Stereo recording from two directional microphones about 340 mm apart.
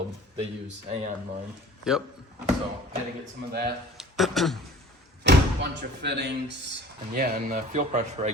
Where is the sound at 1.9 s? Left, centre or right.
Centre.